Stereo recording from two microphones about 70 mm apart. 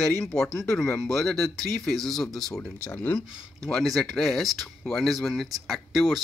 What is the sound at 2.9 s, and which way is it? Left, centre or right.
Speech, left.